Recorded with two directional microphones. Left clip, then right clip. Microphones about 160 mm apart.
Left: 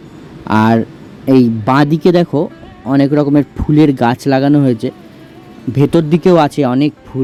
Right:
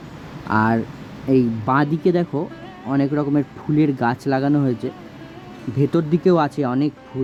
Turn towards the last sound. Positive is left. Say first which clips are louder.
# left 8 dB
turn(degrees=40)  # may be behind; listen again after turning